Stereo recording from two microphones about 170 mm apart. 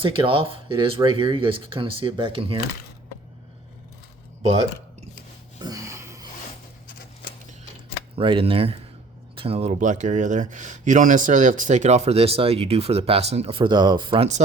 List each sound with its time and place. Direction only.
0.0 s speech: 30° right (ahead or behind)
5.5 s a sound: 20° right (ahead or behind)
8.1 s speech: 30° right (ahead or behind)